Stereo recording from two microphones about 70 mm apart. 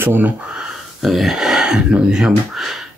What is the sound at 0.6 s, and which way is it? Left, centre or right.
Speech, centre.